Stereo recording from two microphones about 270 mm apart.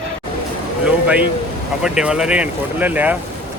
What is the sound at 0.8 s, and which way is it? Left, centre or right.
Speech, centre.